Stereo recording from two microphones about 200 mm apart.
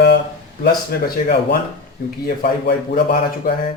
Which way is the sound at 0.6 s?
55° left (ahead or behind).